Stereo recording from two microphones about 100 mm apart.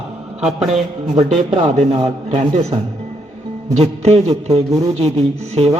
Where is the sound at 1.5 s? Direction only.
75° right (ahead or behind).